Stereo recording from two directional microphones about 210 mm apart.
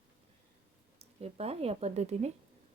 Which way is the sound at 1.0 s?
30° right (ahead or behind).